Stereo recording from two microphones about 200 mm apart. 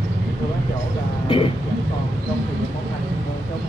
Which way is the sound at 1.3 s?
25° left (ahead or behind).